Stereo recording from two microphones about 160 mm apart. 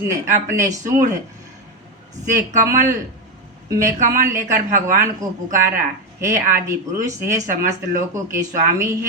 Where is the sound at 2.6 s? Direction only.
15° right (ahead or behind).